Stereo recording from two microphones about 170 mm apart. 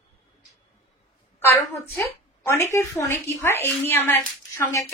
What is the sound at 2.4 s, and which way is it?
Speech, 15° left (ahead or behind).